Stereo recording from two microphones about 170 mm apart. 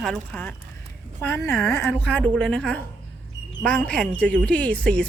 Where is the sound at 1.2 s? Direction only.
15° left (ahead or behind).